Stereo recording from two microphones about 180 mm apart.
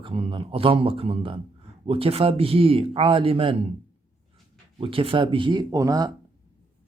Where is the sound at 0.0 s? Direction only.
30° right (ahead or behind).